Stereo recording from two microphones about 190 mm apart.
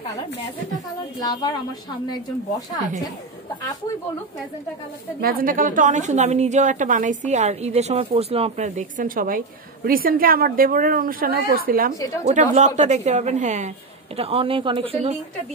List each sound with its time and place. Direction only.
1.2 s speech: 20° left (ahead or behind)
5.2 s a woman's voice: 50° right (ahead or behind)
12.3 s a woman's voice: 40° right (ahead or behind)